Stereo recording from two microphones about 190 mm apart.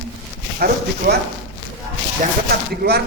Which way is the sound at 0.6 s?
55° right (ahead or behind).